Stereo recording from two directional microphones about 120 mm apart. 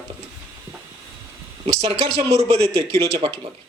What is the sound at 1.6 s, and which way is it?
Speech, 55° right (ahead or behind).